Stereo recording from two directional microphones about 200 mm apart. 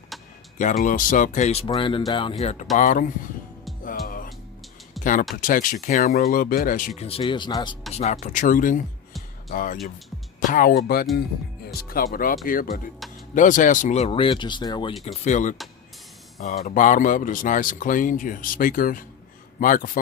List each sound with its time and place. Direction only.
0.1 s a sound: centre (ahead or behind)
0.6 s speech: 40° left (ahead or behind)
3.8 s music: 45° left (ahead or behind)
5.0 s a sound: centre (ahead or behind)
5.4 s speech: 40° left (ahead or behind); by 7.8 s 20° left (ahead or behind)
7.9 s speech: 35° left (ahead or behind)
15.0 s speech: 35° left (ahead or behind)